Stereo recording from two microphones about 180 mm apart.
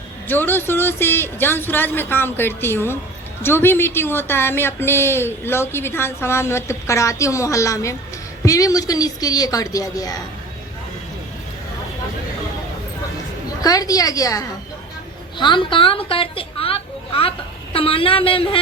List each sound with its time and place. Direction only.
0.3 s a woman's voice: 10° left (ahead or behind)
13.6 s a woman's voice: 20° left (ahead or behind)